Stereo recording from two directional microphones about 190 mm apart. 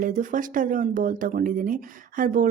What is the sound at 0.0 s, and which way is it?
Speech, 45° right (ahead or behind).